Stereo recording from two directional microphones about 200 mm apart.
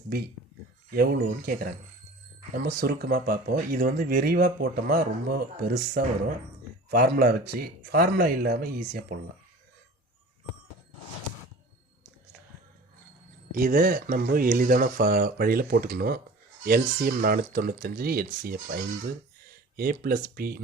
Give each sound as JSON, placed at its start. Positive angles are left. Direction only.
{"t": 0.9, "sound": "speech", "side_deg": -50}
{"t": 13.5, "sound": "speech", "side_deg": -45}